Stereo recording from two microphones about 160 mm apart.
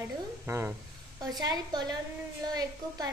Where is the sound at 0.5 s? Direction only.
15° right (ahead or behind).